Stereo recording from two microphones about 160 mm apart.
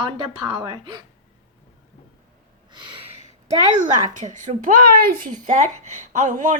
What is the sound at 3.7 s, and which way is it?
A child's voice, 50° right (ahead or behind).